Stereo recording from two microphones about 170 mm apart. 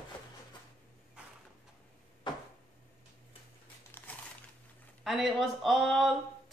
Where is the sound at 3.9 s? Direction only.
10° left (ahead or behind).